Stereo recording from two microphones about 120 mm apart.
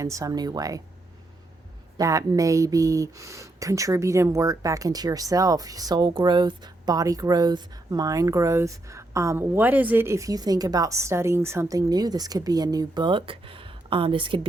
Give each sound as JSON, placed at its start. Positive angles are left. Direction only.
{"t": 0.0, "sound": "speech", "side_deg": -25}
{"t": 2.0, "sound": "speech", "side_deg": -30}